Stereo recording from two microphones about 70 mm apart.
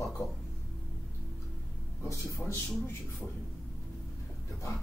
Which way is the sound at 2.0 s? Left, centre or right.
Left.